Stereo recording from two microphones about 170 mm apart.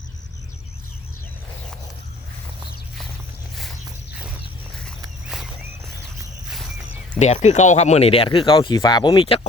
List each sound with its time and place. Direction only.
7.2 s speech: 40° left (ahead or behind)